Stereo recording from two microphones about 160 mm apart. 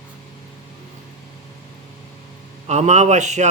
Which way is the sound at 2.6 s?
45° right (ahead or behind).